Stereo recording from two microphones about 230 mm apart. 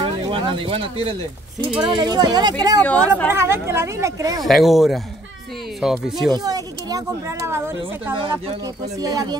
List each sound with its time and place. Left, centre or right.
0.3 s speech: right
2.8 s speech: centre
3.3 s speech: centre
4.4 s speech: centre
6.3 s speech: centre
8.2 s speech: right